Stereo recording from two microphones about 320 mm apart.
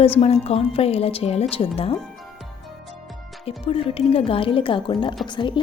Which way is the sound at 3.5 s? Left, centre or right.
Centre.